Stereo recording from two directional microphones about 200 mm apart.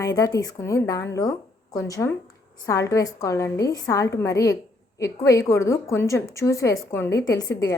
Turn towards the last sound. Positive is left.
turn(degrees=15)  # may be behind; listen again after turning